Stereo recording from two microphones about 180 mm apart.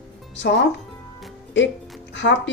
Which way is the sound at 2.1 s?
90° left.